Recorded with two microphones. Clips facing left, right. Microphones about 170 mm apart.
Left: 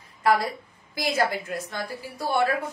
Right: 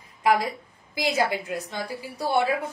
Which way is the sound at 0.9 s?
15° right (ahead or behind).